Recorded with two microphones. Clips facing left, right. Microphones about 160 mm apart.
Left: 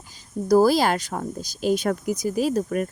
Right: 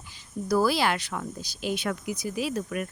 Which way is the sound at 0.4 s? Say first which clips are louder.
Left 6 dB; 40° left (ahead or behind).